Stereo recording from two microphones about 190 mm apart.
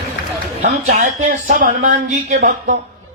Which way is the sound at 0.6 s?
50° right (ahead or behind).